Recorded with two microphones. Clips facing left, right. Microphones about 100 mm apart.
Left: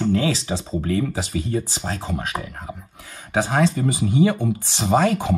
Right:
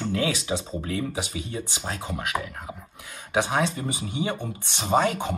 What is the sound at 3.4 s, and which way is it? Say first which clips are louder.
Speech: left 10 dB; 50° left (ahead or behind).